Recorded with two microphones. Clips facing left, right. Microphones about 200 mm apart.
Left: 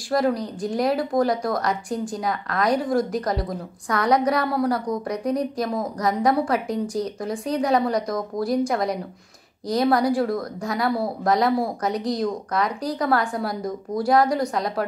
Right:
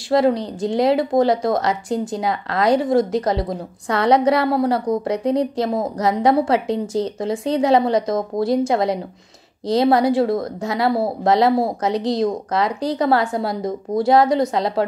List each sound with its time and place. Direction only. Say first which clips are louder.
0.1 s speech: right 5 dB; 25° right (ahead or behind)